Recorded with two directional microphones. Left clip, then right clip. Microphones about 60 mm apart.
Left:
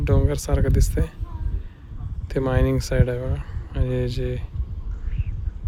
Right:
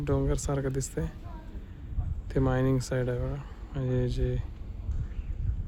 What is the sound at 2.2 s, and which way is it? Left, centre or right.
Speech, centre.